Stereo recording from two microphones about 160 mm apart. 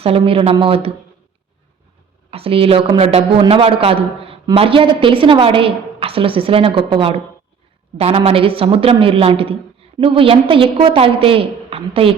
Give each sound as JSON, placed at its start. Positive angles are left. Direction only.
{"t": 0.0, "sound": "a man's voice", "side_deg": -35}
{"t": 2.3, "sound": "a man's voice", "side_deg": -35}